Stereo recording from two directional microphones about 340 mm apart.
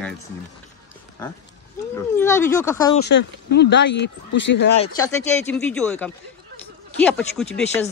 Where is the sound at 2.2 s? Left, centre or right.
Centre.